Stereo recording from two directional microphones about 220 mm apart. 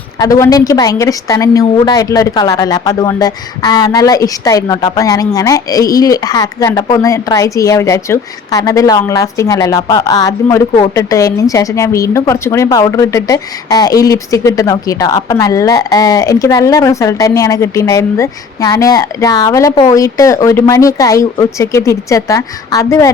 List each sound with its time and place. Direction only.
0.2 s a woman's voice: 15° left (ahead or behind)